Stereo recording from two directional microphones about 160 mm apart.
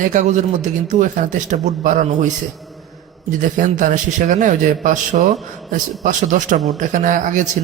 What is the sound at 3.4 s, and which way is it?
Speech, 55° right (ahead or behind).